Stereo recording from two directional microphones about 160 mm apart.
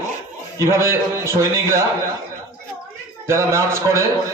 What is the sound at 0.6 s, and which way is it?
A man's voice, 15° right (ahead or behind).